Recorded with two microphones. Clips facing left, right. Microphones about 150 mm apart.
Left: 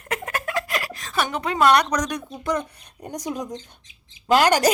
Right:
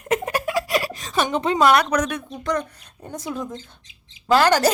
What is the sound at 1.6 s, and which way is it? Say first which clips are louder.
Speech: even; 5° right (ahead or behind).